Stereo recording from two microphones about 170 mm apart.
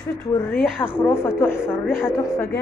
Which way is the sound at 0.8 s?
10° left (ahead or behind).